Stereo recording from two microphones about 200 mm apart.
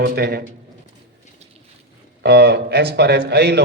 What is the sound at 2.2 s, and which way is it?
A man's voice, 55° right (ahead or behind).